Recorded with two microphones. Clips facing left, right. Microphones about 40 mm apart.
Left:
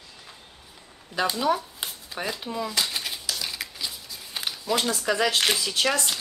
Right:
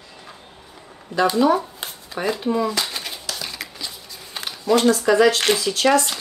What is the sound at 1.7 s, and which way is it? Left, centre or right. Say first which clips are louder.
Shuffling cards: right 4 dB; centre.